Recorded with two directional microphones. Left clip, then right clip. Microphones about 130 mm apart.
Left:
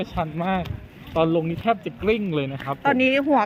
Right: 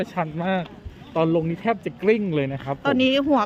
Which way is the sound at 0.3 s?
45° right (ahead or behind).